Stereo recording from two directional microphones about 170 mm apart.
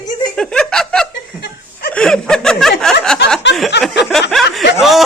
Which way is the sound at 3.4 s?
90° left.